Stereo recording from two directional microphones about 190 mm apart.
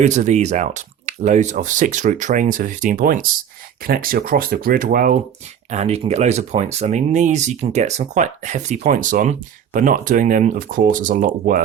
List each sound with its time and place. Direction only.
0.0 s speech: 40° right (ahead or behind)
5.7 s speech: 35° right (ahead or behind)